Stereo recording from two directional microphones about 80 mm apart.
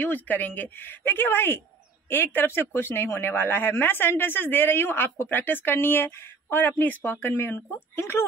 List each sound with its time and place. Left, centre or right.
0.0 s speech: left